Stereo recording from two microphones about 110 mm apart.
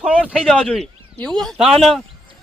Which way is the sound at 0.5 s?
10° left (ahead or behind).